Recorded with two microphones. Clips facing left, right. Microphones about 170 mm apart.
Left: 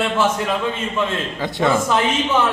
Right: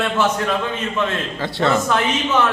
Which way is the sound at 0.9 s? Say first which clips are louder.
Even; 15° left (ahead or behind).